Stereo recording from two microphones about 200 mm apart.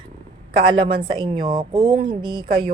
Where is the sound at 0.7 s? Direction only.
25° right (ahead or behind).